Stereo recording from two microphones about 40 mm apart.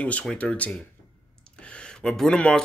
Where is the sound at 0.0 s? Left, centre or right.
Left.